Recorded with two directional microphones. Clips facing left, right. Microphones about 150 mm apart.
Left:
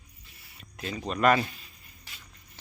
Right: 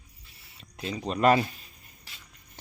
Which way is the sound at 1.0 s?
30° right (ahead or behind).